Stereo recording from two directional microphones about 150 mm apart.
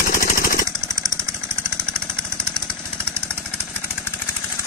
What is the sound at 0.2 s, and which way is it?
Jackhammer, 70° left (ahead or behind).